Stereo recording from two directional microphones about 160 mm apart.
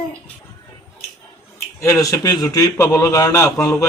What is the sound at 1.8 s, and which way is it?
A man's voice, 20° left (ahead or behind).